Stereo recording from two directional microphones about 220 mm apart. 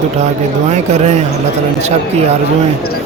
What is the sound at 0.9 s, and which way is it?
Speech, 30° right (ahead or behind).